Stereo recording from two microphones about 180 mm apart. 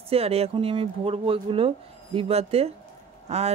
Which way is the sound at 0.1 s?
35° right (ahead or behind).